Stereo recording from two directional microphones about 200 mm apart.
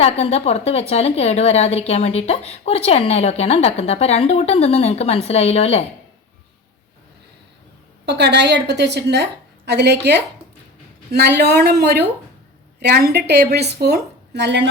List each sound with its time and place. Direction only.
0.0 s a woman's voice: 30° left (ahead or behind)
8.0 s a woman's voice: 60° right (ahead or behind)